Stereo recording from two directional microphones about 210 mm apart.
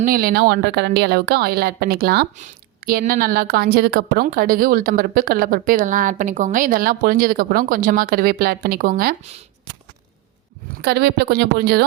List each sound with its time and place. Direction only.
0.0 s a woman's voice: 45° right (ahead or behind)
10.8 s a woman's voice: 50° right (ahead or behind)